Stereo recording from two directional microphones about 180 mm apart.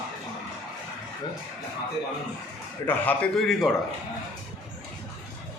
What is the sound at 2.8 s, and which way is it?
Speech, 10° left (ahead or behind).